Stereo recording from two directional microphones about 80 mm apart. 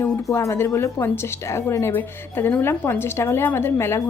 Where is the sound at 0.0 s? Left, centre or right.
Left.